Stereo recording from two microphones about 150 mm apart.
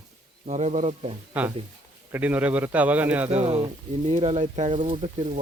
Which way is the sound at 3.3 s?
45° right (ahead or behind).